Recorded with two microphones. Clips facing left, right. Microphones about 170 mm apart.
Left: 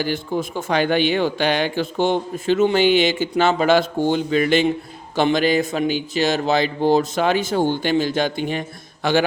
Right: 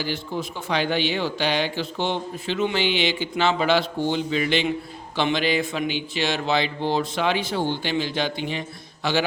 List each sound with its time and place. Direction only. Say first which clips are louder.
0.0 s speech: left 5 dB; 50° left (ahead or behind)